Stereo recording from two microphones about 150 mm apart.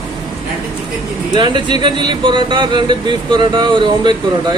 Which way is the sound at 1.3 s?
30° right (ahead or behind).